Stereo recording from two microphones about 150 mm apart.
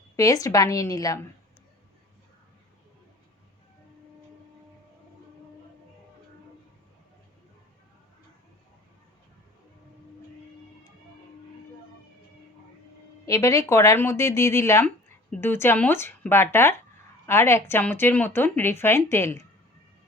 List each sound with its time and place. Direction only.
0.2 s speech: 25° left (ahead or behind)
13.2 s speech: 20° left (ahead or behind)